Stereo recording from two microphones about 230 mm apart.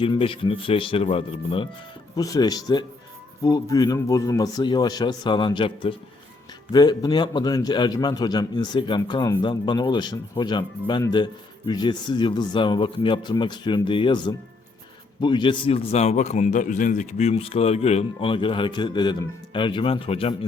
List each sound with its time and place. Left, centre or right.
0.0 s a man's voice: left